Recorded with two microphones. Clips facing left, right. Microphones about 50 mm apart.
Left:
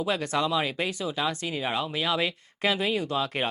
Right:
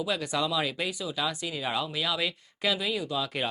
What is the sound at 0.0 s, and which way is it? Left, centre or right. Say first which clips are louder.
Speech: left 3 dB; left.